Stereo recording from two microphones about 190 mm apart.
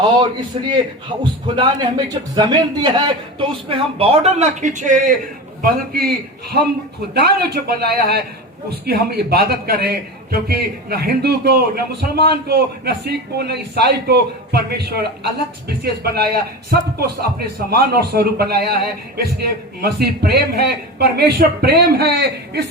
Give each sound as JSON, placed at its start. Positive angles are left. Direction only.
{"t": 0.2, "sound": "a man's voice", "side_deg": -25}
{"t": 5.6, "sound": "a man's voice", "side_deg": -55}